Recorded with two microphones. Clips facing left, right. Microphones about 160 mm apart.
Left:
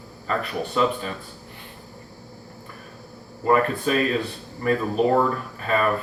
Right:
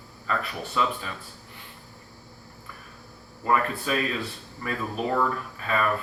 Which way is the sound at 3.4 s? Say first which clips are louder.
Left 5 dB; 40° left (ahead or behind).